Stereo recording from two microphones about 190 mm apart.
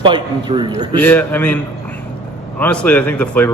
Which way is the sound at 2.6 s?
5° left (ahead or behind).